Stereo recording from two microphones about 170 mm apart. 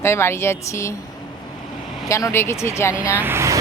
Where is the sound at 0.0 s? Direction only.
15° left (ahead or behind).